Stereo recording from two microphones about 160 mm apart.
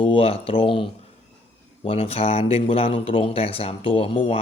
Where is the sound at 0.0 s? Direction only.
35° left (ahead or behind).